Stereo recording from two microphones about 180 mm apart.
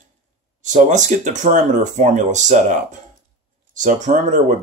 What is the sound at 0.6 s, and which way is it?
Speech, 40° right (ahead or behind).